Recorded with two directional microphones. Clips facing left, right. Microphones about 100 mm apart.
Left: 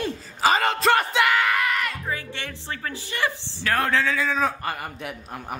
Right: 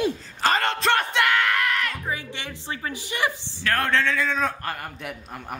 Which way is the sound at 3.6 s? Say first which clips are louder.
Even; 5° left (ahead or behind).